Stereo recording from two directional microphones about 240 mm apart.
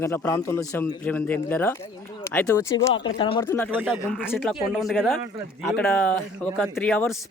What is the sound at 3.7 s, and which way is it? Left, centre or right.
Speech, centre.